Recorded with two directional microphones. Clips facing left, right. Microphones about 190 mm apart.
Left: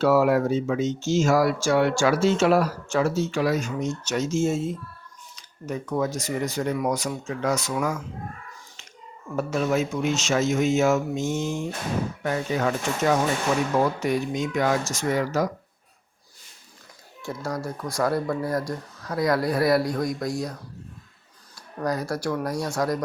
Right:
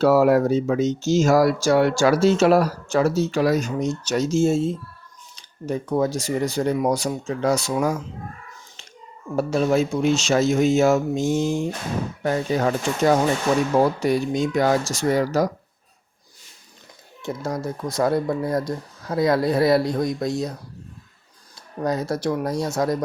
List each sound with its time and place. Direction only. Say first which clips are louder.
0.0 s speech: right 3 dB; 40° right (ahead or behind)
9.3 s speech: right 4 dB; 35° right (ahead or behind)
17.2 s speech: right 3 dB; 20° right (ahead or behind)